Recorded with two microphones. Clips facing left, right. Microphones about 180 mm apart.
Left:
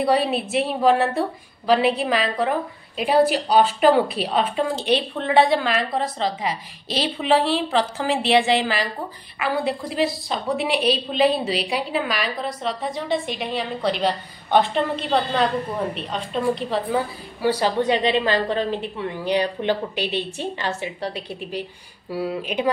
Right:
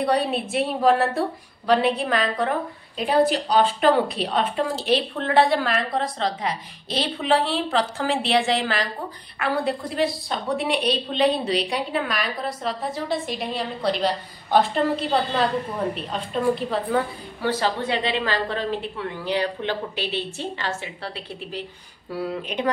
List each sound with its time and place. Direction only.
0.0 s a woman's voice: 5° left (ahead or behind)
16.9 s a woman's voice: 10° left (ahead or behind)